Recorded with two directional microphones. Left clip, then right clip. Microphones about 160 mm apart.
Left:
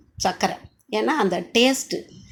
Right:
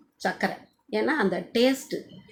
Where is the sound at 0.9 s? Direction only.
25° left (ahead or behind).